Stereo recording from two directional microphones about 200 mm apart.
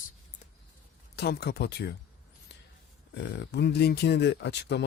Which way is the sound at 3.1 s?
60° left (ahead or behind).